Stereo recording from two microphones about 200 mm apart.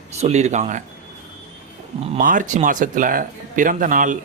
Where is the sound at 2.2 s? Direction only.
40° right (ahead or behind).